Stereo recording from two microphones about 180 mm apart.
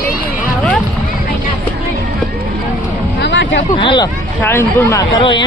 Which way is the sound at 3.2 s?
80° left.